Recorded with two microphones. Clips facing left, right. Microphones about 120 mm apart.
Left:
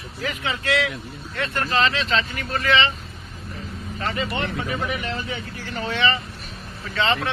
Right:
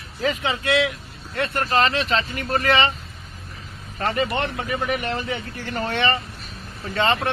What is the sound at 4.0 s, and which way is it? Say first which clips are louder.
Speech: right 4 dB; 50° right (ahead or behind).